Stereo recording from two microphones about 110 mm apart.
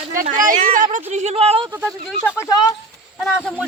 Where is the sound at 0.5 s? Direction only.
80° right; by 1.7 s 60° right (ahead or behind).